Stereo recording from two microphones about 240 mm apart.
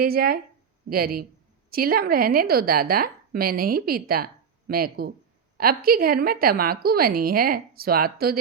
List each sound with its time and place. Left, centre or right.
0.0 s a woman's voice: right